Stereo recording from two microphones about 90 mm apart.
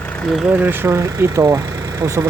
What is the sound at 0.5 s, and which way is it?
Speech, 25° right (ahead or behind).